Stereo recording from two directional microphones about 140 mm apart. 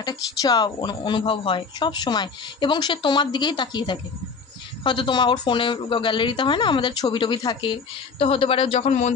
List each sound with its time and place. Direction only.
0.0 s speech: 30° left (ahead or behind); by 9.1 s 55° left (ahead or behind)